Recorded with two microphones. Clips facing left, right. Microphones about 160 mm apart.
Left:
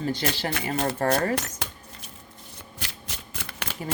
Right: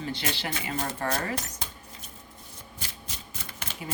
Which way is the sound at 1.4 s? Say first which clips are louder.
Left 4 dB; 85° left.